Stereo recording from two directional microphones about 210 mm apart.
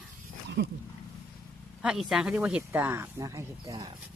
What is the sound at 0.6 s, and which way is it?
Wild animals, 55° right (ahead or behind).